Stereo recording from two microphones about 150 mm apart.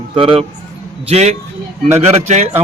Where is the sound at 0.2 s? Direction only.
35° right (ahead or behind).